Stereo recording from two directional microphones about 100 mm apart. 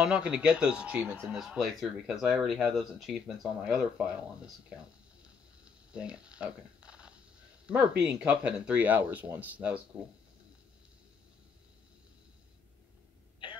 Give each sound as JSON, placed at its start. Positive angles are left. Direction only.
{"t": 0.0, "sound": "speech", "side_deg": -10}
{"t": 1.3, "sound": "speech", "side_deg": -5}
{"t": 5.9, "sound": "a sound", "side_deg": -10}
{"t": 7.6, "sound": "speech", "side_deg": -10}